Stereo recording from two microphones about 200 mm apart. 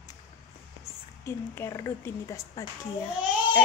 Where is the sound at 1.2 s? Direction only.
15° left (ahead or behind).